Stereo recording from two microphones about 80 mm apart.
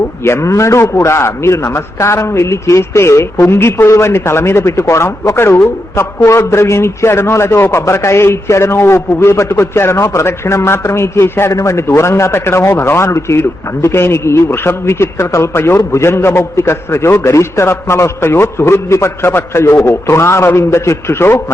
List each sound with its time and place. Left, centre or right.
0.2 s a man's voice: left